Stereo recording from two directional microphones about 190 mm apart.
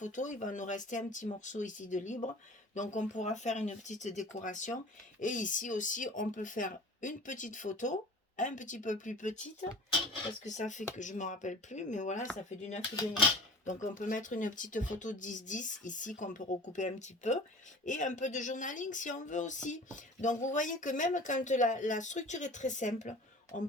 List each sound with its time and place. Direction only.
0.0 s speech: 40° left (ahead or behind)
13.8 s speech: 40° left (ahead or behind)